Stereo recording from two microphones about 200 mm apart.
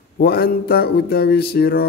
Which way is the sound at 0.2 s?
50° left (ahead or behind).